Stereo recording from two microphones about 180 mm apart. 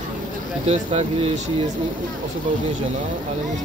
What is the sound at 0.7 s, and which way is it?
Speech, 35° right (ahead or behind).